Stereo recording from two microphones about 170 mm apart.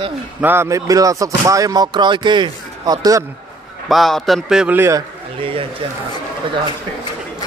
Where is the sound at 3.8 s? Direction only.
Centre (ahead or behind); by 5.0 s 15° right (ahead or behind).